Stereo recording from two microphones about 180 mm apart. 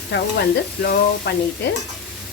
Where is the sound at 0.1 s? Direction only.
70° left (ahead or behind).